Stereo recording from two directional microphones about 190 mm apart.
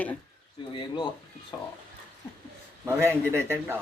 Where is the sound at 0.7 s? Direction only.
25° left (ahead or behind).